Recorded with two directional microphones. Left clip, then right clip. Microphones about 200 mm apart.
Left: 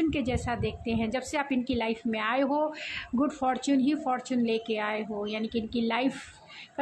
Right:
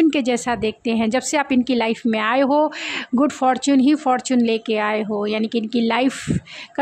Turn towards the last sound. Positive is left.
turn(degrees=-50)  # may be behind; listen again after turning